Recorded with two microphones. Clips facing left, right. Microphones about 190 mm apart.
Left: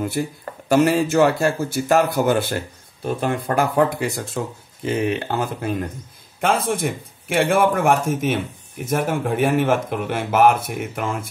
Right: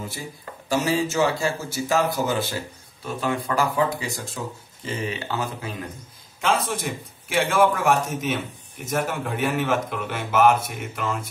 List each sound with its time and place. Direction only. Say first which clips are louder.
0.2 s speech: left 11 dB; 60° left (ahead or behind)